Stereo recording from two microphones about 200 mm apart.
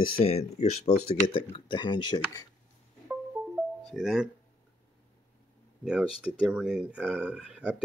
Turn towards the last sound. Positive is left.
turn(degrees=-5)  # may be behind; listen again after turning